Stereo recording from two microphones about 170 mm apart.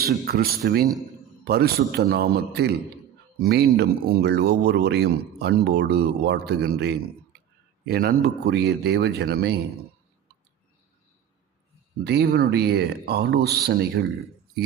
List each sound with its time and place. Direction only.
0.0 s speech: 65° right (ahead or behind)
12.0 s speech: 75° right (ahead or behind)